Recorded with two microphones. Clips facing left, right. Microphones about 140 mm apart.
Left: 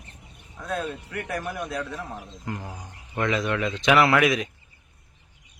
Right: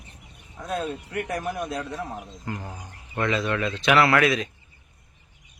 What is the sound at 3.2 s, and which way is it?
Speech, 10° left (ahead or behind).